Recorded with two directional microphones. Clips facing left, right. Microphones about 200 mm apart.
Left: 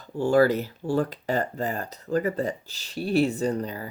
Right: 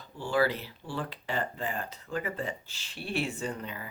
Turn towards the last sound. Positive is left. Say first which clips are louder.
# left 9 dB
turn(degrees=40)  # may be behind; listen again after turning